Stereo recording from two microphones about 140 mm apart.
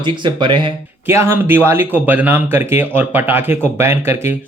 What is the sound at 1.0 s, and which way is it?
Speech, 15° right (ahead or behind).